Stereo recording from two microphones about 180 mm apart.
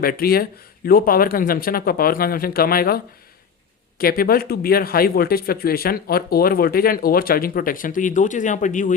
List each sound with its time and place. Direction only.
0.0 s a man's voice: 55° left (ahead or behind)